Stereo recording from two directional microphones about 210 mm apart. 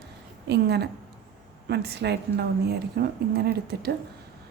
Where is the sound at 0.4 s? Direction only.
50° right (ahead or behind).